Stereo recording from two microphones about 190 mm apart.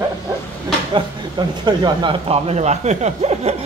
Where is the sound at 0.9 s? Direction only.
25° right (ahead or behind).